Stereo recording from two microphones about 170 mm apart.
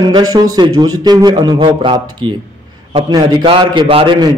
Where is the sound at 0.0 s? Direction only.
25° right (ahead or behind).